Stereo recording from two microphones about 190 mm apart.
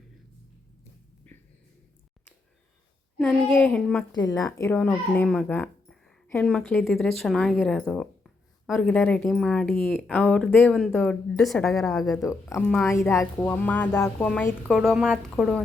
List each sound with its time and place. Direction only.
1.2 s a sound: 10° left (ahead or behind)
3.2 s a woman's voice: 10° left (ahead or behind)
4.1 s a child's voice: 15° left (ahead or behind); by 12.2 s centre (ahead or behind)
12.2 s a woman's voice: 15° left (ahead or behind)
12.6 s speech: 5° left (ahead or behind)
12.9 s a woman's voice: 15° left (ahead or behind)